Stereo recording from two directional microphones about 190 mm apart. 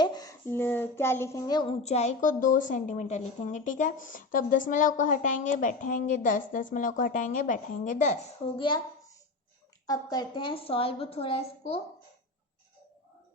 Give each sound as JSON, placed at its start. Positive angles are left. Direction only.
{"t": 0.0, "sound": "child singing", "side_deg": 20}
{"t": 1.8, "sound": "a woman's voice", "side_deg": 35}
{"t": 8.5, "sound": "a woman's voice", "side_deg": 25}
{"t": 9.8, "sound": "a woman's voice", "side_deg": 20}